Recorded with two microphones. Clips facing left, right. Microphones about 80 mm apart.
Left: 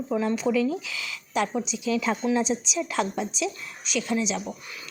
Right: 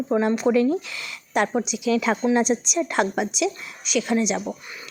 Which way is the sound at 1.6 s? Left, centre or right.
Right.